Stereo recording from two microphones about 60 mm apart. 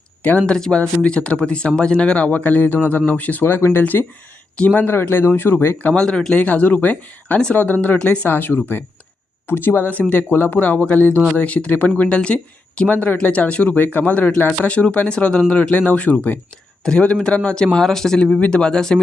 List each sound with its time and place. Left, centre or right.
0.2 s speech: left
0.4 s speech: centre; by 4.0 s left
4.5 s speech: left
4.8 s speech: left
5.9 s speech: centre
6.4 s speech: left
8.3 s speech: left; by 18.3 s centre
18.3 s speech: centre